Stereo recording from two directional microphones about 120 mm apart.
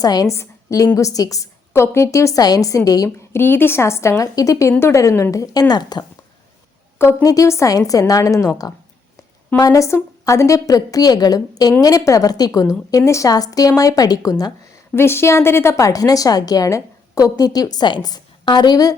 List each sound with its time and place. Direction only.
0.0 s a woman's voice: 30° left (ahead or behind)
7.0 s a woman's voice: 25° left (ahead or behind)
14.9 s a woman's voice: 20° left (ahead or behind)